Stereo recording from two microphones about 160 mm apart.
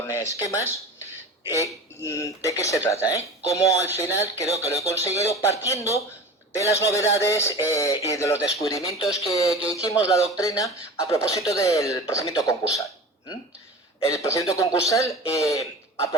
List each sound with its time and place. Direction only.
0.0 s speech: 15° left (ahead or behind)
14.1 s speech: 20° left (ahead or behind)